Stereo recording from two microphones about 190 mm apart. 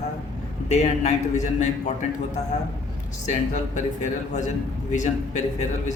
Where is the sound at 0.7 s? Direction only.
35° left (ahead or behind).